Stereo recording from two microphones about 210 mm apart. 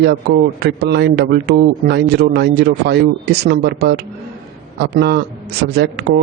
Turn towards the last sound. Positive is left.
turn(degrees=-55)  # may be behind; listen again after turning